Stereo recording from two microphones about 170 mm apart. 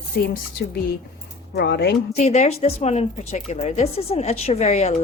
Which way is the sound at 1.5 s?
75° left (ahead or behind).